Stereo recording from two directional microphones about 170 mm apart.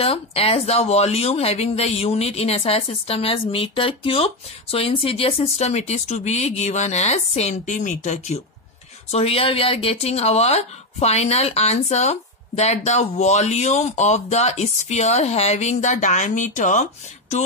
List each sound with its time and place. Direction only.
0.0 s speech: 35° left (ahead or behind)